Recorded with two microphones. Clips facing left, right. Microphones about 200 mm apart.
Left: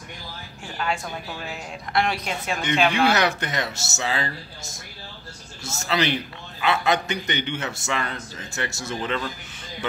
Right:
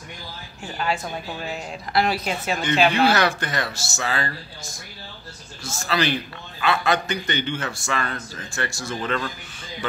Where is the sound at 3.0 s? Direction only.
20° left (ahead or behind).